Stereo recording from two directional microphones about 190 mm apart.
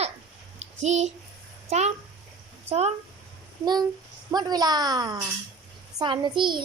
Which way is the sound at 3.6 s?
20° right (ahead or behind).